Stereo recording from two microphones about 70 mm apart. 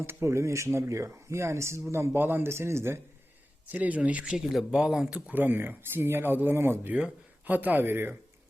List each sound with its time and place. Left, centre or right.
0.0 s speech: right
3.7 s speech: right
4.3 s speech: centre
5.4 s speech: right
6.9 s speech: right